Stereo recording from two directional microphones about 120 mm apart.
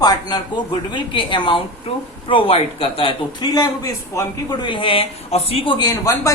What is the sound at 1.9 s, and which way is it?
Speech, 55° left (ahead or behind).